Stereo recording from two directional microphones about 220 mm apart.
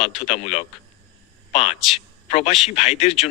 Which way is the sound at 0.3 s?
30° left (ahead or behind).